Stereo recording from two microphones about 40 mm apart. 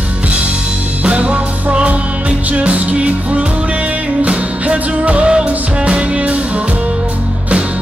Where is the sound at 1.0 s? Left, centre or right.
Right.